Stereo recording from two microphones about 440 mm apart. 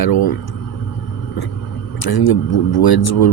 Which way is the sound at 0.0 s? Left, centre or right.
Left.